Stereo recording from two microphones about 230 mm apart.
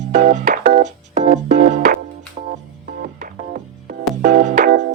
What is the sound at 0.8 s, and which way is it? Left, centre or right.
Organ, right.